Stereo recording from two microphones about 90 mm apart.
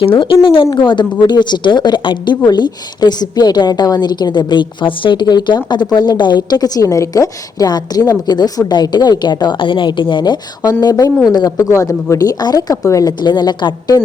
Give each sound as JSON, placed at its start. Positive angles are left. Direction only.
{"t": 0.0, "sound": "speech", "side_deg": 75}
{"t": 0.7, "sound": "a woman's voice", "side_deg": 60}
{"t": 10.6, "sound": "a woman's voice", "side_deg": 45}
{"t": 11.7, "sound": "a woman's voice", "side_deg": 35}
{"t": 13.2, "sound": "a woman's voice", "side_deg": 50}